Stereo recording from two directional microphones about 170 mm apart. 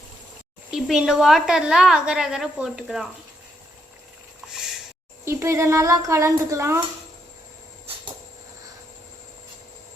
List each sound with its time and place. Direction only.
0.7 s a woman's voice: 5° right (ahead or behind)
5.2 s speech: 15° right (ahead or behind)